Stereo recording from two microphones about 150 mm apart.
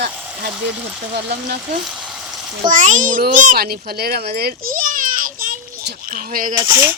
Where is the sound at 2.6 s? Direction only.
60° right (ahead or behind).